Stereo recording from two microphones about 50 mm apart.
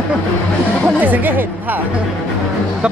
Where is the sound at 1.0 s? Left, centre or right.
Right.